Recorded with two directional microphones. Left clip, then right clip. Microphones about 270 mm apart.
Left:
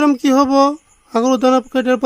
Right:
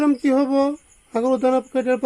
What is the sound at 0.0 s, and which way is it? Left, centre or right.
Speech, left.